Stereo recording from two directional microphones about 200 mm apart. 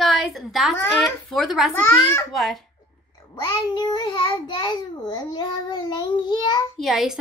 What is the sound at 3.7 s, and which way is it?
A child's voice, 20° left (ahead or behind).